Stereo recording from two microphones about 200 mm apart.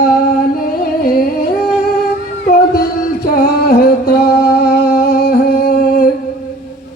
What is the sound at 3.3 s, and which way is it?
Music, 50° left (ahead or behind).